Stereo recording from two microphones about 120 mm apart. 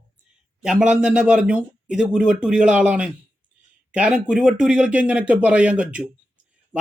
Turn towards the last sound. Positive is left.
turn(degrees=-10)  # may be behind; listen again after turning